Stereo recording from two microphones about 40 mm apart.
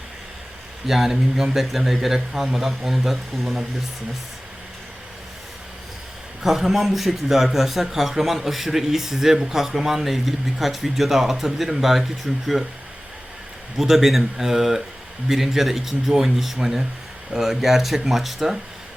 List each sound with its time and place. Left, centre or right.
0.9 s a man's voice: centre
6.4 s speech: centre
13.7 s a man's voice: centre